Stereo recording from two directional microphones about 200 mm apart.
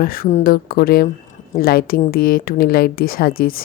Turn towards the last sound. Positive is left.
turn(degrees=45)  # may be behind; listen again after turning